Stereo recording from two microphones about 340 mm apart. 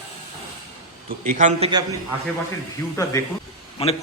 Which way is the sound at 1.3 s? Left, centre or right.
Right.